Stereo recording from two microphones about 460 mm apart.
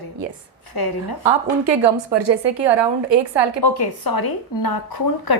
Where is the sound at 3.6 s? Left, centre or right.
Left.